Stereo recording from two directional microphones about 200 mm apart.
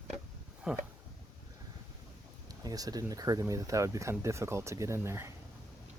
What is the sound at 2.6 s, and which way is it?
Speech, 20° right (ahead or behind).